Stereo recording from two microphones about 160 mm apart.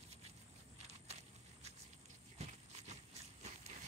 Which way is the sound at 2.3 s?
45° right (ahead or behind).